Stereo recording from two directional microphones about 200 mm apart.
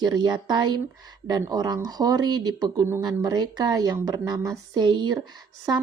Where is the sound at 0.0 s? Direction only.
20° right (ahead or behind).